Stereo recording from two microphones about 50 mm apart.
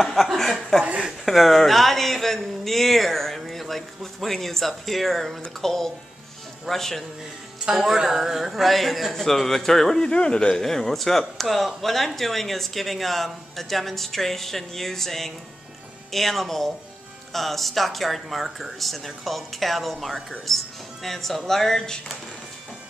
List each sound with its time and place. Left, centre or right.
0.0 s speech: centre
7.7 s speech: centre
10.0 s speech: centre
10.6 s speech: centre